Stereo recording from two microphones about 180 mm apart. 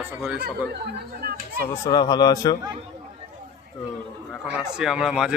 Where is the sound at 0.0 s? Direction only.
5° right (ahead or behind).